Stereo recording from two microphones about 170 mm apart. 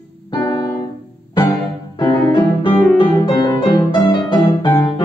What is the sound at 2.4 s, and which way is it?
Piano, 10° left (ahead or behind).